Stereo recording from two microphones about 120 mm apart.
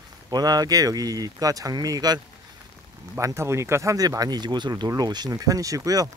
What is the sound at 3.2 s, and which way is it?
Speech, 25° right (ahead or behind).